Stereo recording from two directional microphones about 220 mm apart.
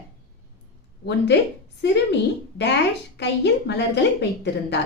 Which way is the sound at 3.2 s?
50° left (ahead or behind).